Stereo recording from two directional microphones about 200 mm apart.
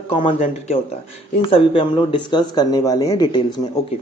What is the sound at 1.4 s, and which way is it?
Speech, 25° left (ahead or behind).